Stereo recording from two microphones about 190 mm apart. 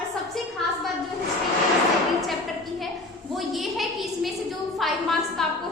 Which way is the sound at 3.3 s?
Centre (ahead or behind).